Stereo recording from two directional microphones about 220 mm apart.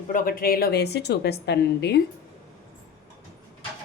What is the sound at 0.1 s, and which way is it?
A woman's voice, 40° left (ahead or behind).